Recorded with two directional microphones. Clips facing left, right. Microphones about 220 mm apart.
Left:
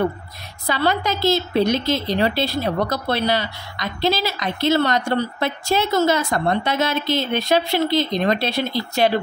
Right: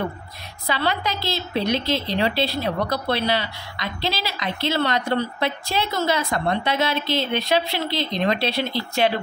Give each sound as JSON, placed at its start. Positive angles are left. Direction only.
{"t": 0.7, "sound": "a woman's voice", "side_deg": 45}